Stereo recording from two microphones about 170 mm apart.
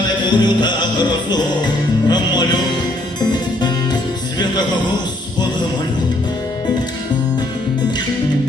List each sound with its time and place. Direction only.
0.3 s music: 25° left (ahead or behind)
3.2 s harpsichord: 25° left (ahead or behind)